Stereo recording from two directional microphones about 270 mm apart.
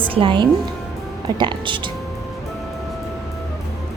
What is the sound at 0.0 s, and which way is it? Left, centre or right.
A woman's voice, centre.